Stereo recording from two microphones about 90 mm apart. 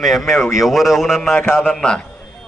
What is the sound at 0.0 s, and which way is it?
A man's voice, centre (ahead or behind).